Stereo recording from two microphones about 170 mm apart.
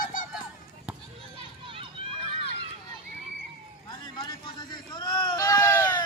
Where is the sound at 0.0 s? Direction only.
50° left (ahead or behind).